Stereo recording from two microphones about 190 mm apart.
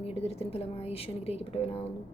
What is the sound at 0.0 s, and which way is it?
A woman's voice, 30° left (ahead or behind).